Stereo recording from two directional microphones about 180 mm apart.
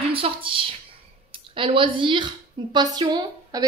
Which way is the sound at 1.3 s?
30° right (ahead or behind).